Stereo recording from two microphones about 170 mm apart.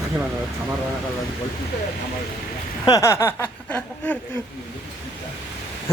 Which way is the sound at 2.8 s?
20° left (ahead or behind).